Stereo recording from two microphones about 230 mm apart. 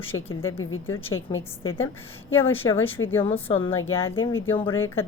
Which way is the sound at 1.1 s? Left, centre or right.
Left.